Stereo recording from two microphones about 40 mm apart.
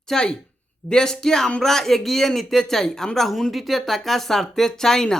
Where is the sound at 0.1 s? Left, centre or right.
Centre.